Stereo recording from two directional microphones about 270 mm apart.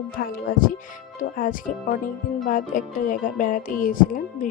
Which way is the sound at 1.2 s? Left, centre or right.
Left.